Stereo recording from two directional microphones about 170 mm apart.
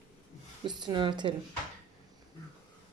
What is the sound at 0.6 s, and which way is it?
Speech, 25° right (ahead or behind).